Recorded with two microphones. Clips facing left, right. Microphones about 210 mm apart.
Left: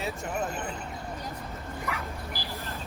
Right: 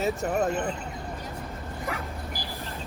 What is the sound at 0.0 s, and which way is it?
Speech, 45° right (ahead or behind).